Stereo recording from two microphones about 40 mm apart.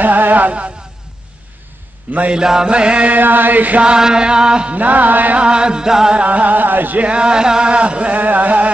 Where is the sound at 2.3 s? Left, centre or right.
Centre.